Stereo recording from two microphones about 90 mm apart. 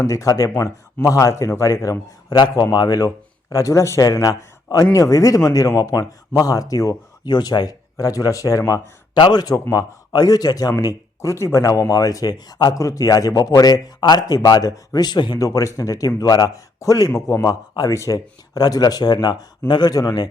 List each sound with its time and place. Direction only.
0.1 s a man's voice: 40° left (ahead or behind)
9.1 s a man's voice: 55° left (ahead or behind)
15.4 s a man's voice: 35° left (ahead or behind)